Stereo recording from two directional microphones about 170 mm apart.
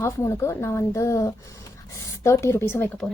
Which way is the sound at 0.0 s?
15° left (ahead or behind).